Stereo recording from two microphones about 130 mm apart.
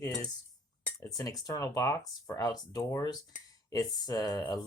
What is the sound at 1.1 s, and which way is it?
Speech, 25° left (ahead or behind).